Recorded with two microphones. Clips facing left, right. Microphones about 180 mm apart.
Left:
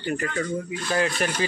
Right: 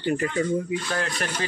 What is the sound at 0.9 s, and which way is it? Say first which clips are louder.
Speech: left 5 dB; 5° left (ahead or behind).